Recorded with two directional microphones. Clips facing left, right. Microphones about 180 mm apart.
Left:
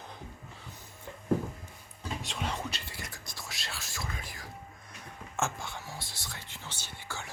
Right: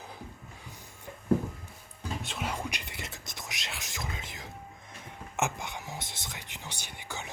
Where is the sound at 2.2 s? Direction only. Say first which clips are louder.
Even; 5° right (ahead or behind).